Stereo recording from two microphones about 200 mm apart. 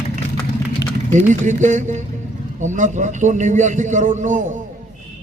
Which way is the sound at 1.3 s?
40° right (ahead or behind).